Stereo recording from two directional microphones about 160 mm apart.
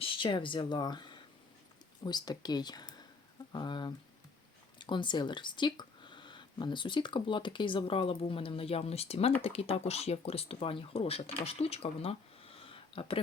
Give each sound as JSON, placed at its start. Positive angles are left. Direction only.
{"t": 0.0, "sound": "speech", "side_deg": 30}